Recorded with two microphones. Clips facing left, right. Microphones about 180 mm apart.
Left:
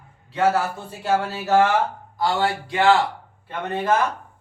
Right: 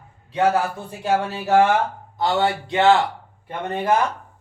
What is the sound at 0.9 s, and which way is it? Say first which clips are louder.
A man's voice: even; 15° right (ahead or behind).